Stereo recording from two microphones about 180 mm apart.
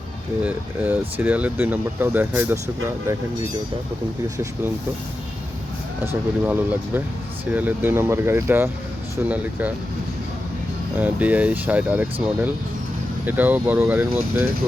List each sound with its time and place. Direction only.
0.4 s speech: 10° right (ahead or behind)
6.1 s speech: 10° right (ahead or behind)
10.9 s speech: 10° right (ahead or behind)